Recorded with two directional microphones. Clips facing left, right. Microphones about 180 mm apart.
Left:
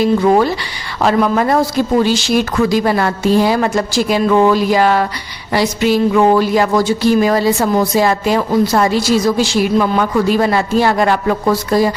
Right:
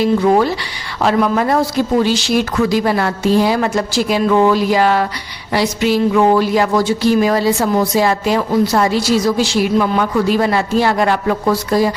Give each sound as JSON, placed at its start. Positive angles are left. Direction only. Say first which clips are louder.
{"t": 0.0, "sound": "a woman's voice", "louder": "left 1 dB", "side_deg": 45}